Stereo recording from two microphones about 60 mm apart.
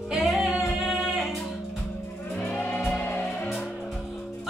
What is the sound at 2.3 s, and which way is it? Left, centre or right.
Music, left.